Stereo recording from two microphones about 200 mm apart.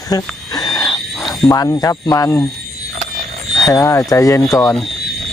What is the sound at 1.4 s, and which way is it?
Speech, 15° left (ahead or behind).